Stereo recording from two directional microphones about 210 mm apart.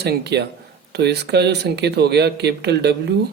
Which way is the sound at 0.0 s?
50° right (ahead or behind).